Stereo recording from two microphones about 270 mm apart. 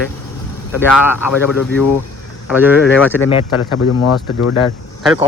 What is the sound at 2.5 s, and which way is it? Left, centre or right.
Speech, centre.